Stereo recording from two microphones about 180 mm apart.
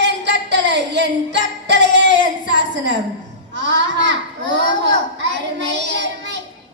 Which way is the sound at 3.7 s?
75° right (ahead or behind).